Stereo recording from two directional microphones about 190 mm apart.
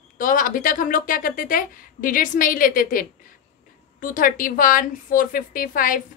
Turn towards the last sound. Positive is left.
turn(degrees=45)  # may be behind; listen again after turning